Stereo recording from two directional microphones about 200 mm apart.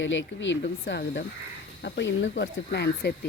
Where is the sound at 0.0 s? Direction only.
65° left (ahead or behind).